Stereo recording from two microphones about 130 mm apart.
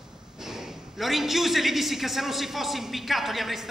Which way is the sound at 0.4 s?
5° right (ahead or behind).